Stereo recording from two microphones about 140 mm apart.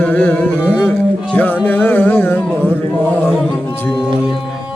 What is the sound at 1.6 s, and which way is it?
Music, 15° left (ahead or behind).